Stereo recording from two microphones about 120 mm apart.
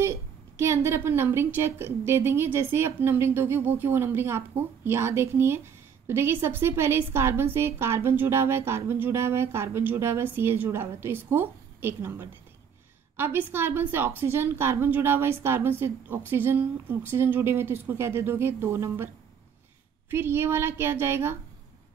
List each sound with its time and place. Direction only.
0.0 s a woman's voice: 20° right (ahead or behind)
20.1 s a woman's voice: 20° right (ahead or behind)